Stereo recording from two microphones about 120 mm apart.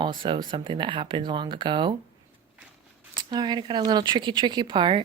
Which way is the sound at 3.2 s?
35° right (ahead or behind).